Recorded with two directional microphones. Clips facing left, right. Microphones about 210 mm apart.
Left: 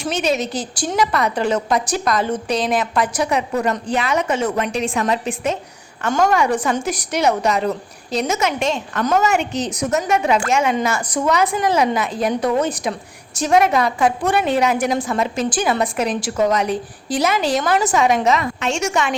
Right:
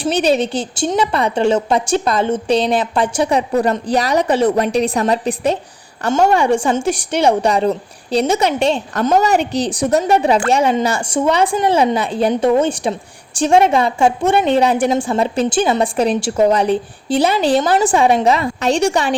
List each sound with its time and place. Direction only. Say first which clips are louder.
0.0 s a woman's voice: right 5 dB; 35° right (ahead or behind)